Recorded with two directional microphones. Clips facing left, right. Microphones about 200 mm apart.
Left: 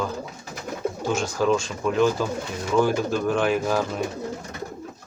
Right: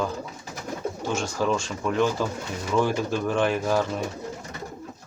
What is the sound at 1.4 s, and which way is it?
Speech, 5° left (ahead or behind).